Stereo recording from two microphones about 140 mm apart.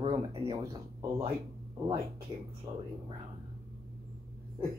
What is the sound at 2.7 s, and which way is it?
Speech, 30° right (ahead or behind).